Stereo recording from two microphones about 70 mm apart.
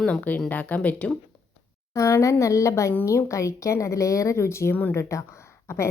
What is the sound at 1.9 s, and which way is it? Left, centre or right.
A woman's voice, left.